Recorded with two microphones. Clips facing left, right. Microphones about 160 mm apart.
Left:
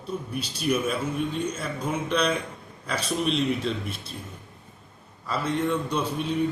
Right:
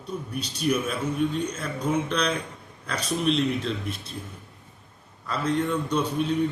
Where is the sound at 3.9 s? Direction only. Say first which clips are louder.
Even; 30° left (ahead or behind).